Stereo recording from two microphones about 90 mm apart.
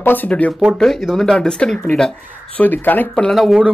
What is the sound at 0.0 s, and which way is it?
Speech, 20° left (ahead or behind).